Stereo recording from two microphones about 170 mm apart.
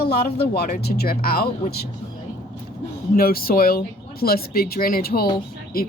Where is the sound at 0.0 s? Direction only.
70° left (ahead or behind).